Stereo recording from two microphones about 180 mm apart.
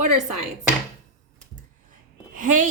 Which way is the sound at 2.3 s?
45° right (ahead or behind).